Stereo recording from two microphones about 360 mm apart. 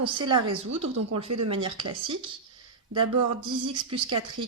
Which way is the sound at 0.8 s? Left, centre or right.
Right.